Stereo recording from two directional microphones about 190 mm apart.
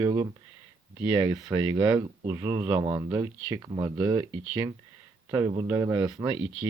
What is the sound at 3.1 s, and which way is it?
Speech, 15° right (ahead or behind).